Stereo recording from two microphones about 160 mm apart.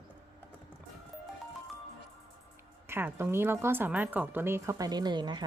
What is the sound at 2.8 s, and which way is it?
A woman's voice, 15° right (ahead or behind).